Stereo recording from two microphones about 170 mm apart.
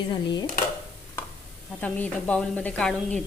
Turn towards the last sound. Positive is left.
turn(degrees=5)  # may be behind; listen again after turning